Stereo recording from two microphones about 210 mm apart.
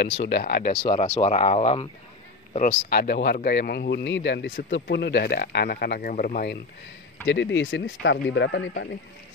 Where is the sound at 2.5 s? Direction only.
45° left (ahead or behind).